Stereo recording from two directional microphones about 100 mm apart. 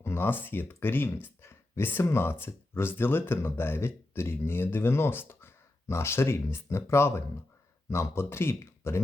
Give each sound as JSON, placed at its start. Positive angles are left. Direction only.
{"t": 0.0, "sound": "speech", "side_deg": 25}